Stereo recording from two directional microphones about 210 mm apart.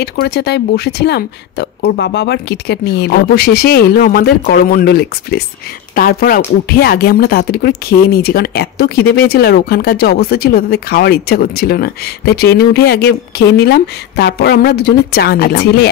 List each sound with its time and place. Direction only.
0.0 s speech: 50° left (ahead or behind)